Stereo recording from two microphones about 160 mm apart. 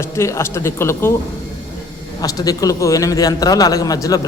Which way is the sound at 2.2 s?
20° left (ahead or behind).